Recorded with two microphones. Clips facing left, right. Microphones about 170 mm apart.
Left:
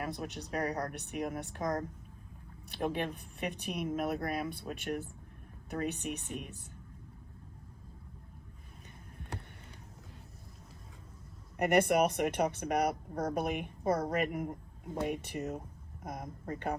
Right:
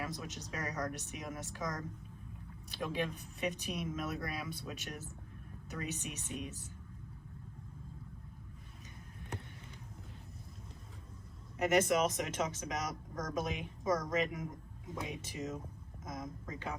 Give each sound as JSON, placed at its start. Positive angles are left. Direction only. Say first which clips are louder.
{"t": 0.0, "sound": "speech", "louder": "left 4 dB", "side_deg": 55}
{"t": 11.5, "sound": "speech", "louder": "left 3 dB", "side_deg": 60}